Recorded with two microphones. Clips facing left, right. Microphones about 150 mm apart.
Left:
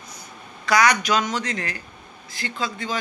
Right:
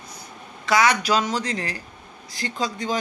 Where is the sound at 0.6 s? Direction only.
25° right (ahead or behind).